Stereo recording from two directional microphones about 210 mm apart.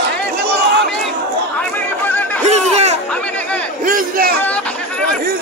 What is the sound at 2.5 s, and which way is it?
Chatter, 30° right (ahead or behind).